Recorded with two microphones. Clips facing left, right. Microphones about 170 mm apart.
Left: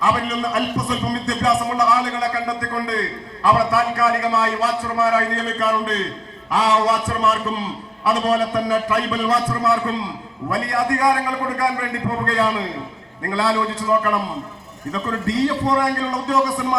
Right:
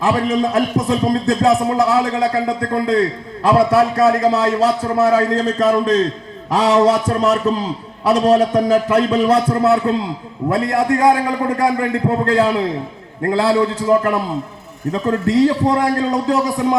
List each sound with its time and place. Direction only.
0.0 s a man's voice: 25° right (ahead or behind)
8.7 s a man's voice: 25° right (ahead or behind)
10.8 s a man's voice: 25° right (ahead or behind)